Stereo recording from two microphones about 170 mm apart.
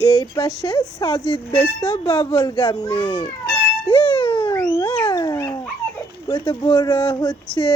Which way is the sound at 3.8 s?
25° left (ahead or behind).